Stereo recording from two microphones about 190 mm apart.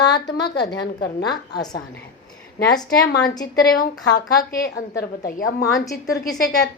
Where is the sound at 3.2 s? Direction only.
20° left (ahead or behind).